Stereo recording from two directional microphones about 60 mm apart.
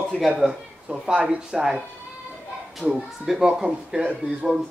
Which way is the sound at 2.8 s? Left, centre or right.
Right.